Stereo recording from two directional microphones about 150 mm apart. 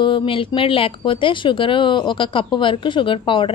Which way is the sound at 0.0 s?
35° left (ahead or behind).